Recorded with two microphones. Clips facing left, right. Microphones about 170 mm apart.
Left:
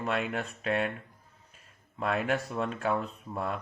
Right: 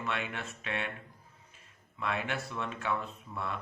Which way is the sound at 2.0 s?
40° left (ahead or behind).